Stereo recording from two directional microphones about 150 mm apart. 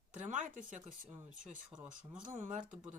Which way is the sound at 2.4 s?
60° right (ahead or behind).